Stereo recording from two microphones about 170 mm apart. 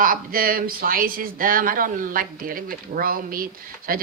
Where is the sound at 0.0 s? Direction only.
55° right (ahead or behind).